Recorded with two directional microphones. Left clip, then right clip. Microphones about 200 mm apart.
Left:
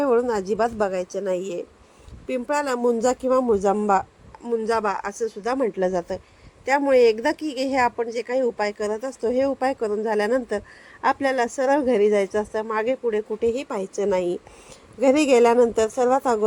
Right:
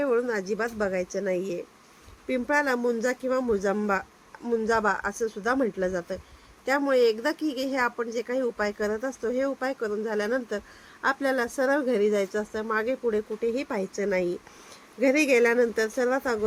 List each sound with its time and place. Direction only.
0.3 s speech: 10° left (ahead or behind)